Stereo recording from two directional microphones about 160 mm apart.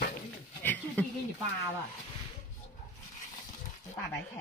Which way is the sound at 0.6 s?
10° left (ahead or behind).